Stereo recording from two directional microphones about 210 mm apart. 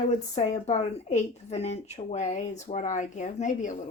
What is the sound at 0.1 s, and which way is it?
Speech, 35° left (ahead or behind).